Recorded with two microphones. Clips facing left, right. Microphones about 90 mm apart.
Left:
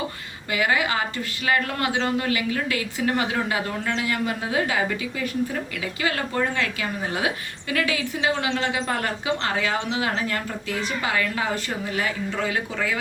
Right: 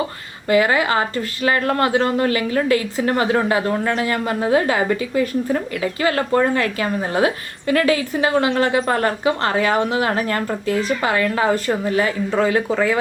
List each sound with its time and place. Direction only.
0.4 s a woman's voice: 40° right (ahead or behind)